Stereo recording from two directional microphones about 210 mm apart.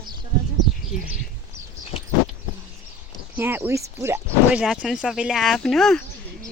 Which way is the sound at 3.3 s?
10° right (ahead or behind).